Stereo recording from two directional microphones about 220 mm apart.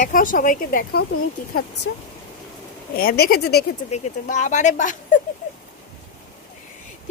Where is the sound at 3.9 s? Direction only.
30° left (ahead or behind).